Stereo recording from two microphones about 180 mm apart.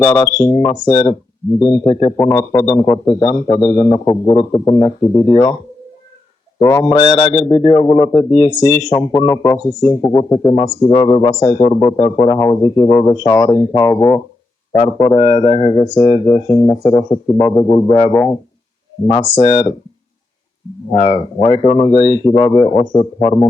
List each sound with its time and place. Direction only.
0.0 s a man's voice: 15° left (ahead or behind)
2.1 s a man's voice: 15° left (ahead or behind)
6.6 s a man's voice: 15° left (ahead or behind)
6.9 s speech: 35° left (ahead or behind)
8.1 s a man's voice: 15° left (ahead or behind)
14.8 s a man's voice: 30° left (ahead or behind); by 18.3 s 10° left (ahead or behind)
19.4 s speech: 40° left (ahead or behind)
20.9 s speech: 30° left (ahead or behind)